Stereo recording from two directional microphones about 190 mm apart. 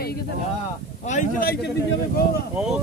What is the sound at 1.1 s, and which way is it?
Speech, 45° left (ahead or behind).